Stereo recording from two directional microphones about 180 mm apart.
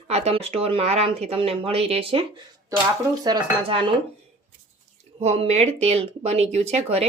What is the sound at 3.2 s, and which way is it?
Dishes, 25° right (ahead or behind).